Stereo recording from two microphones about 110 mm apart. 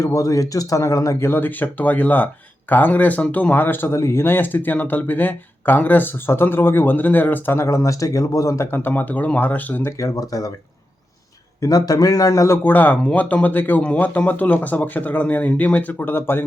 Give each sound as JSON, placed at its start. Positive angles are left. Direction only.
{"t": 0.0, "sound": "speech", "side_deg": 30}
{"t": 10.0, "sound": "speech", "side_deg": 35}
{"t": 11.6, "sound": "speech", "side_deg": 35}
{"t": 12.6, "sound": "speech", "side_deg": 15}